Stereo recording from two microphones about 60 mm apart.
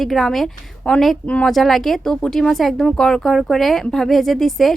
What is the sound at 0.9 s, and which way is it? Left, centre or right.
Speech, left.